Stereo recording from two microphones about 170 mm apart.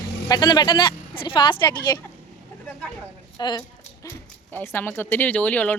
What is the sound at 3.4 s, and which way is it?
Speech, 25° left (ahead or behind).